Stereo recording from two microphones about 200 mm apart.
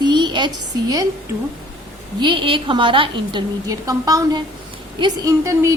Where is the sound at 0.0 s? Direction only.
20° right (ahead or behind).